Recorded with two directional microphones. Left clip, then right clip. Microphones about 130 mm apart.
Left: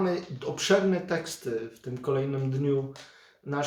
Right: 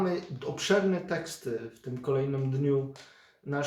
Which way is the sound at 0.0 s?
20° left (ahead or behind).